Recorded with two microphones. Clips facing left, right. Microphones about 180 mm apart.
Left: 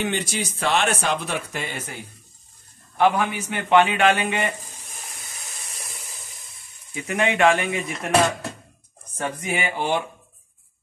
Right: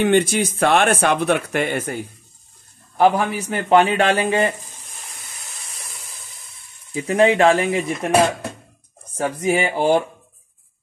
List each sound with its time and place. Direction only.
0.0 s speech: 55° right (ahead or behind)
3.0 s a man's voice: 40° right (ahead or behind)
6.9 s a man's voice: 35° right (ahead or behind)
9.4 s a man's voice: 40° right (ahead or behind)